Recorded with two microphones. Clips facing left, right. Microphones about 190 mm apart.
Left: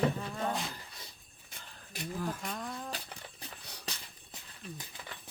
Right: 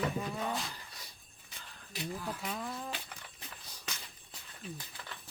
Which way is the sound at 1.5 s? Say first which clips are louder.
Even; 45° left (ahead or behind).